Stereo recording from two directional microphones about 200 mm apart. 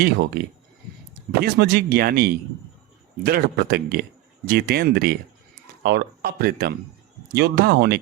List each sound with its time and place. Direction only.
0.0 s speech: 55° right (ahead or behind)